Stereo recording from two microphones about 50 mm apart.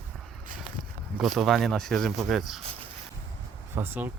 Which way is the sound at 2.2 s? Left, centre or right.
Centre.